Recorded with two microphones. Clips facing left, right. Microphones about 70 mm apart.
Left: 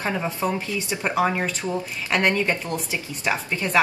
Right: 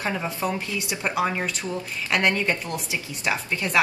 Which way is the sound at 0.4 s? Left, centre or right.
Left.